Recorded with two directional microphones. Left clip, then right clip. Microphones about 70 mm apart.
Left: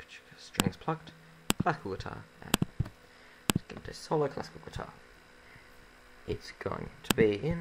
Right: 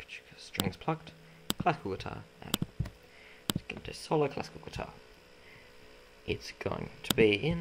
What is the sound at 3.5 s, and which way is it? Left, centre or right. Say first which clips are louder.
Speech: even; centre.